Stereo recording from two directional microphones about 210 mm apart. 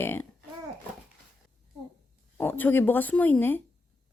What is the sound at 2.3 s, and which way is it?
Speech, 10° left (ahead or behind).